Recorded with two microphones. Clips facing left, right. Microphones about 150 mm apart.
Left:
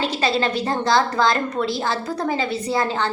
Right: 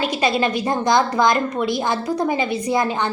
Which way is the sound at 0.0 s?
15° right (ahead or behind).